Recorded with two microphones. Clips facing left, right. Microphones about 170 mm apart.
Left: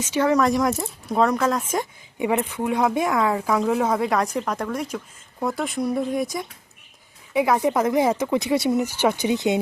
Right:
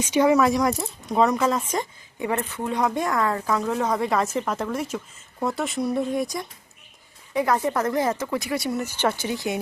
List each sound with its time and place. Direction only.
0.0 s speech: 15° right (ahead or behind)
2.1 s speech: 15° left (ahead or behind)
7.3 s speech: 10° left (ahead or behind)